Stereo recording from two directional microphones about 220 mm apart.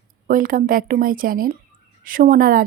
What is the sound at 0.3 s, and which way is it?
A woman's voice, 40° right (ahead or behind).